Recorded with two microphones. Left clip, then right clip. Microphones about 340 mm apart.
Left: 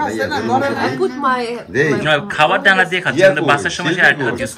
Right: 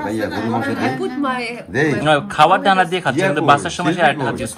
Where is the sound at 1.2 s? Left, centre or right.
Centre.